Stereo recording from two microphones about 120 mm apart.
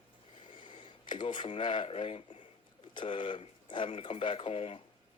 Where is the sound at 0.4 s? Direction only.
45° left (ahead or behind).